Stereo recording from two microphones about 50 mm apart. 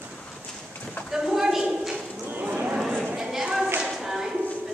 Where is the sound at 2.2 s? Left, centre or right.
Right.